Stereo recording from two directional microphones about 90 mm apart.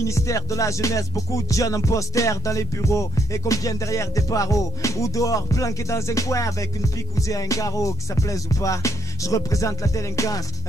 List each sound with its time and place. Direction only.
0.1 s music: 35° left (ahead or behind)